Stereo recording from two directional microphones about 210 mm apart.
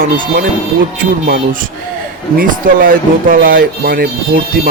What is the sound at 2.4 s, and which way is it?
Speech, 40° right (ahead or behind).